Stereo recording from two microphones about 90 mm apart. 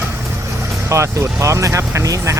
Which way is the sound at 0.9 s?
35° right (ahead or behind).